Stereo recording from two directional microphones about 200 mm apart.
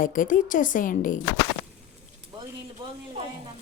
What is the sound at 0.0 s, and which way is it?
A woman's voice, 40° left (ahead or behind).